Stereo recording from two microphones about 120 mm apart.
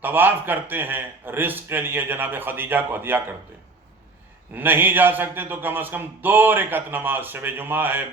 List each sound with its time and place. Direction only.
0.0 s a man's voice: 15° right (ahead or behind)
4.5 s a man's voice: 15° right (ahead or behind)